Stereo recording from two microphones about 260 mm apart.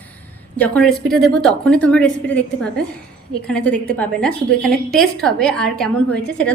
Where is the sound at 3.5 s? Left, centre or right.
Centre.